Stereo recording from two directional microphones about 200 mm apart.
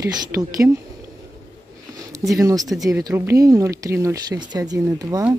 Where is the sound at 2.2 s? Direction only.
15° right (ahead or behind).